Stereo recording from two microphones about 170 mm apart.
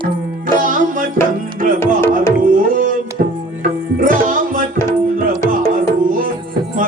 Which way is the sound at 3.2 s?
55° right (ahead or behind).